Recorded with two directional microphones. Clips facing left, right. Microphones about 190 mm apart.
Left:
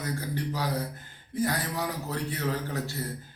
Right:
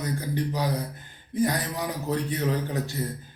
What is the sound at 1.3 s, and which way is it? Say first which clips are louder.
A man's voice: right 3 dB; 20° right (ahead or behind).